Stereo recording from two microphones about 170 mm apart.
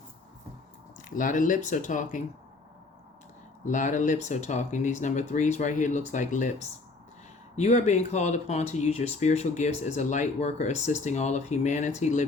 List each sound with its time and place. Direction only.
1.1 s speech: 50° left (ahead or behind)
3.7 s speech: 45° left (ahead or behind)